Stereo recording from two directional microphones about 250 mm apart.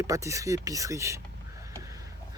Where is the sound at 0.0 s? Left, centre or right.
Centre.